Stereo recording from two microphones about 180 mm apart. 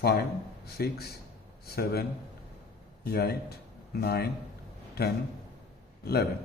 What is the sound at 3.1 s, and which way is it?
A man's voice, 60° left (ahead or behind).